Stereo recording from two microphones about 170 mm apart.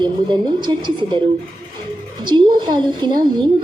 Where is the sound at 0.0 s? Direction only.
25° right (ahead or behind).